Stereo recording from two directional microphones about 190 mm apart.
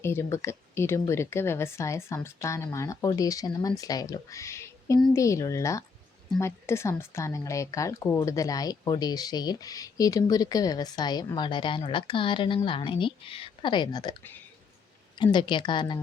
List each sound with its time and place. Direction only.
0.0 s speech: 15° left (ahead or behind)
15.2 s speech: 25° left (ahead or behind)